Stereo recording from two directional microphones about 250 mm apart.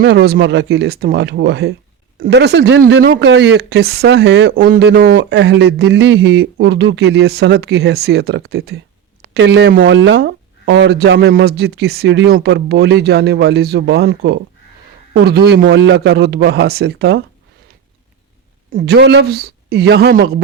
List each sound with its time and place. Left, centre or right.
0.0 s speech: right
18.7 s speech: right